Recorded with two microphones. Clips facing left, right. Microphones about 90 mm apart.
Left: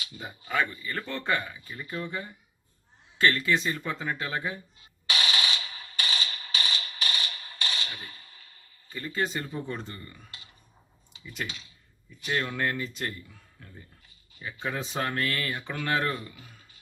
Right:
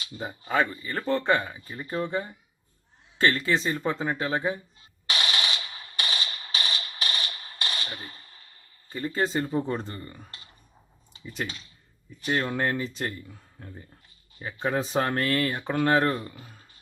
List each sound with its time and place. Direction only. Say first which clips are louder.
0.2 s speech: right 4 dB; 30° right (ahead or behind)
5.0 s machine gun: even; 40° right (ahead or behind)
8.9 s speech: right 4 dB; 30° right (ahead or behind)